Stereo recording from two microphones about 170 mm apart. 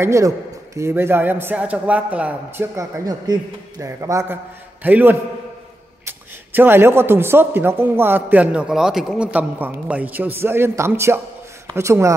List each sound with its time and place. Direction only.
0.0 s a man's voice: 15° right (ahead or behind)